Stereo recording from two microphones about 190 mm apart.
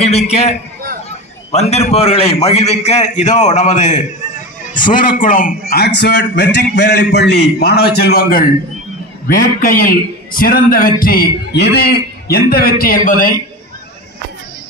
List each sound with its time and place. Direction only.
0.0 s a man's voice: 35° left (ahead or behind)